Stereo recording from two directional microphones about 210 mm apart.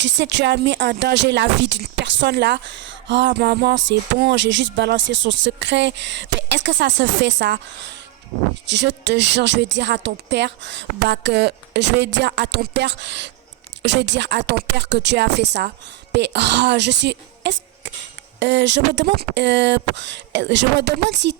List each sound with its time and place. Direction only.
0.0 s speech: 55° right (ahead or behind)
8.6 s speech: 55° right (ahead or behind)